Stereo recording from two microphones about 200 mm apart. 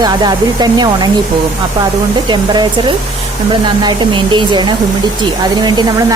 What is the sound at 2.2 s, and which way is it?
Speech, 20° right (ahead or behind).